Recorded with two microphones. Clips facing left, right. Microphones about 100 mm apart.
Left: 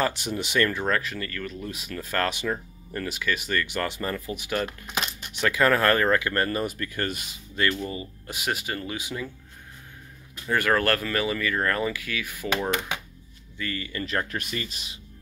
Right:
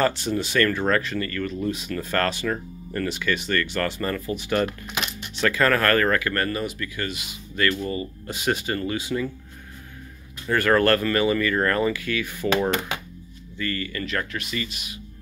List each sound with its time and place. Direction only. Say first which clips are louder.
0.0 s speech: right 4 dB; 15° left (ahead or behind)
0.9 s speech: right 4 dB; centre (ahead or behind); by 6.6 s 25° left (ahead or behind)
6.6 s speech: even; 45° left (ahead or behind)
7.5 s speech: right 3 dB; 15° left (ahead or behind)
10.4 s speech: right 4 dB; 10° left (ahead or behind)
13.6 s speech: right 3 dB; 10° left (ahead or behind)
14.3 s speech: right 2 dB; 45° left (ahead or behind)